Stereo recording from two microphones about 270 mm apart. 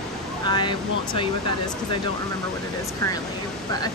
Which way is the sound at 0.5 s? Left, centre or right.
Centre.